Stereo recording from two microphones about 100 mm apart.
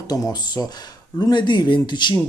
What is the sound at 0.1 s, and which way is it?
Speech, 40° left (ahead or behind).